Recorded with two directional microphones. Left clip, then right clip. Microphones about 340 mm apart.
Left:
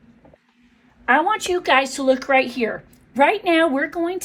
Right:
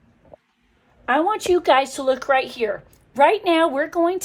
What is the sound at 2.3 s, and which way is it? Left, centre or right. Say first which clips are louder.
A woman's voice: left 1 dB; centre.